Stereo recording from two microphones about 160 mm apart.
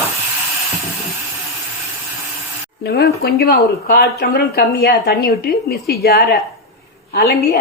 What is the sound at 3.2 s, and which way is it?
A woman's voice, 80° left.